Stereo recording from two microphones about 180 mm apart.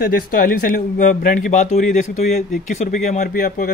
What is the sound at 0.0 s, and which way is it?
Speech, 55° left (ahead or behind).